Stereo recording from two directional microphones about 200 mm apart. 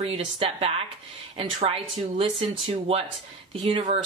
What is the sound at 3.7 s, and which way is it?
Speech, 30° right (ahead or behind).